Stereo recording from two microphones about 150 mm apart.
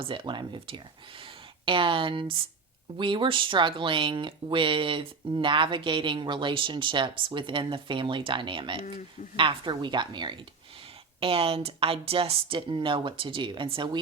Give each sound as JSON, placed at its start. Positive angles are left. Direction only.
{"t": 0.0, "sound": "speech", "side_deg": -35}